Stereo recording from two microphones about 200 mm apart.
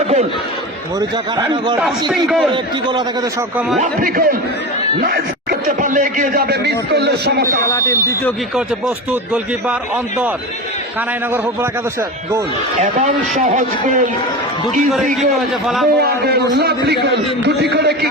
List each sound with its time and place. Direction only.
0.9 s speech: 20° right (ahead or behind)
1.8 s a man's voice: centre (ahead or behind)
2.5 s speech: 25° right (ahead or behind)
3.8 s speech: 45° right (ahead or behind)
7.6 s speech: 15° left (ahead or behind)
9.3 s a man's voice: 5° right (ahead or behind)
13.4 s a man's voice: 40° right (ahead or behind)
14.8 s a man's voice: centre (ahead or behind)
16.0 s speech: 55° right (ahead or behind)